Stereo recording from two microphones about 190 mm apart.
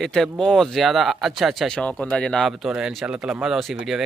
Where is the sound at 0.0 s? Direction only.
5° left (ahead or behind).